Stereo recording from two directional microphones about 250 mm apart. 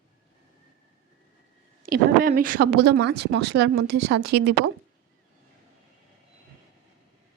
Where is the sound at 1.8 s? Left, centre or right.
Right.